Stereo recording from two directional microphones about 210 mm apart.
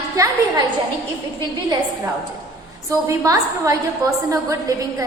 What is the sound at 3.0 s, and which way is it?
A woman's voice, 15° right (ahead or behind).